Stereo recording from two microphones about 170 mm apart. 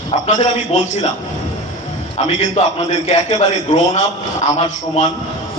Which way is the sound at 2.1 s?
40° left (ahead or behind).